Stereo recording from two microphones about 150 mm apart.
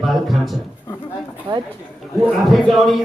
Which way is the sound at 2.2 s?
Centre (ahead or behind).